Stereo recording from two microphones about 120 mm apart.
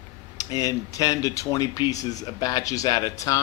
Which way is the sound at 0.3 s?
30° left (ahead or behind).